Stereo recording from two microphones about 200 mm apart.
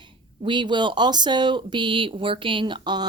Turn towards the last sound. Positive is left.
turn(degrees=-20)  # may be behind; listen again after turning